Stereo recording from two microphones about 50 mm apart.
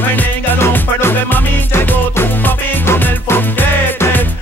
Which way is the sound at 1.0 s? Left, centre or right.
Left.